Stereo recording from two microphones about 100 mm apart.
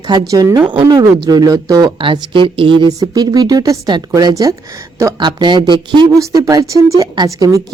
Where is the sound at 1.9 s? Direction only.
55° right (ahead or behind).